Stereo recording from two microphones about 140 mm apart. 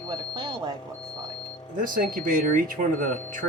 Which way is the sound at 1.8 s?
85° right.